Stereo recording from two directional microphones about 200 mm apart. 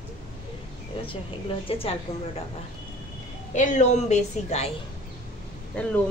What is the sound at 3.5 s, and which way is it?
A woman's voice, 35° left (ahead or behind).